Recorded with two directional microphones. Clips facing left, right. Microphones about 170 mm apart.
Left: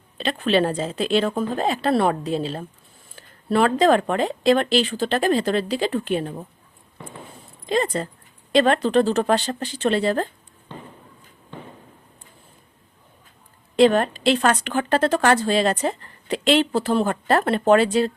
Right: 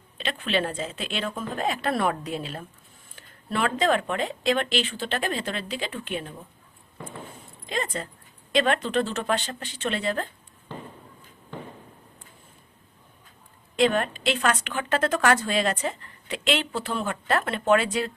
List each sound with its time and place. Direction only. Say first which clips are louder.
0.2 s a woman's voice: left 7 dB; 40° left (ahead or behind)
7.7 s a woman's voice: left 8 dB; 35° left (ahead or behind)
13.7 s a woman's voice: left 6 dB; 35° left (ahead or behind)